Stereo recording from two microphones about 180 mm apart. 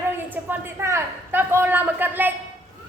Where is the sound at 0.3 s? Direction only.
10° right (ahead or behind).